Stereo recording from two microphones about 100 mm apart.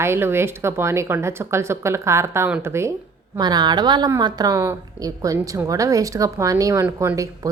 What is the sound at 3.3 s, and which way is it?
A woman's voice, 45° right (ahead or behind).